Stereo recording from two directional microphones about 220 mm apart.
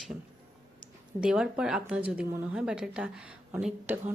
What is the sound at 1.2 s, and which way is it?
Speech, 5° right (ahead or behind).